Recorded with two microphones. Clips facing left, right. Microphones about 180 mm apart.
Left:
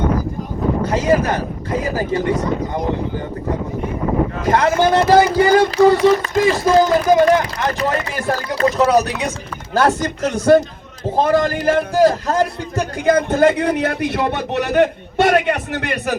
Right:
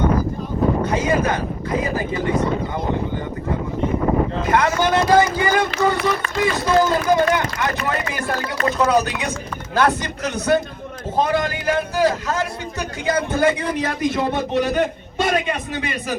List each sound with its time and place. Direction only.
1.1 s speech: 35° left (ahead or behind)
4.4 s a man's voice: 35° left (ahead or behind)
13.1 s a man's voice: 55° left (ahead or behind)